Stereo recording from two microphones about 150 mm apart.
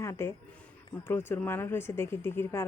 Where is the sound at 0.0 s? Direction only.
20° left (ahead or behind).